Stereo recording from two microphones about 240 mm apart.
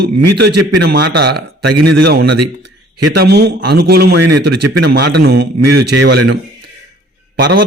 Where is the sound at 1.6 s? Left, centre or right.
Right.